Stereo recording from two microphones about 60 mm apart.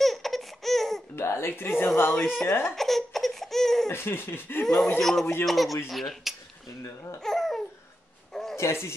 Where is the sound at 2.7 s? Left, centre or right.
Centre.